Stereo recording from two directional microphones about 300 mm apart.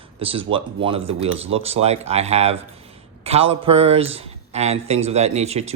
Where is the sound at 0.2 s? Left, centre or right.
Centre.